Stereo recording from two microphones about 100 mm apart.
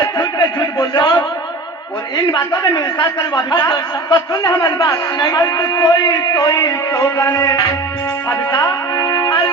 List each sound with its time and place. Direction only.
0.0 s a sound: 40° left (ahead or behind)
2.1 s a man's voice: 45° left (ahead or behind)
9.0 s music: 35° left (ahead or behind)